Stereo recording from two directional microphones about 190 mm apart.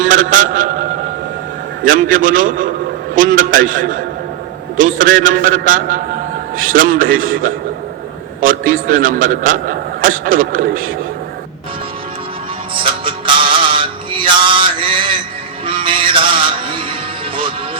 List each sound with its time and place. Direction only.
0.1 s a man's voice: 45° right (ahead or behind)
1.8 s a man's voice: 45° right (ahead or behind)
8.4 s a man's voice: 45° right (ahead or behind)
12.7 s music: 25° right (ahead or behind)